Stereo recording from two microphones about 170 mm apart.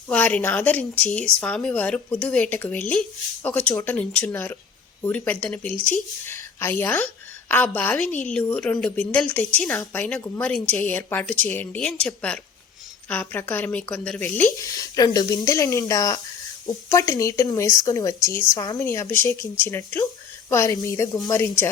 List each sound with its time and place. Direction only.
0.1 s a woman's voice: 5° left (ahead or behind)
14.7 s a woman's voice: 20° left (ahead or behind)